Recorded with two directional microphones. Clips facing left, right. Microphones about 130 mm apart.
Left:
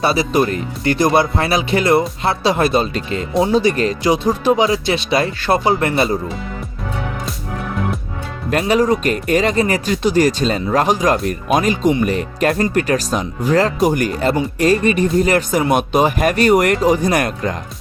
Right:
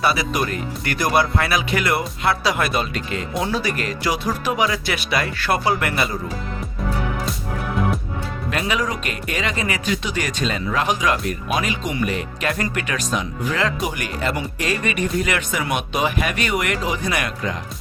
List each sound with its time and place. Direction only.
0.0 s speech: 30° left (ahead or behind)
8.4 s speech: 40° left (ahead or behind)